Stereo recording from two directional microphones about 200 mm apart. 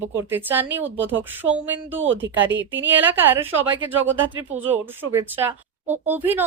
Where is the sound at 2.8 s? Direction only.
10° right (ahead or behind).